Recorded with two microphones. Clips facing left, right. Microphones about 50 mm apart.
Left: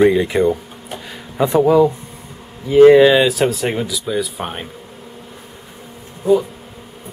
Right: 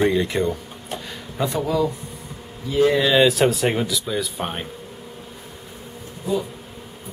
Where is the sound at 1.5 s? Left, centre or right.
Left.